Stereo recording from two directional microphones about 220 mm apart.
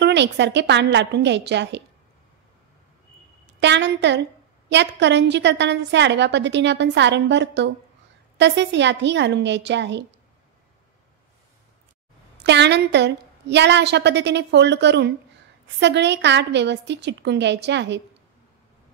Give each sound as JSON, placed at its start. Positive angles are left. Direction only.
{"t": 0.0, "sound": "a woman's voice", "side_deg": -50}
{"t": 3.5, "sound": "a woman's voice", "side_deg": -50}
{"t": 12.4, "sound": "a woman's voice", "side_deg": -50}